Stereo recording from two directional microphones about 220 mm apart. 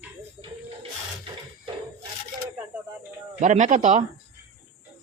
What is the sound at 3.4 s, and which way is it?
Speech, 35° right (ahead or behind).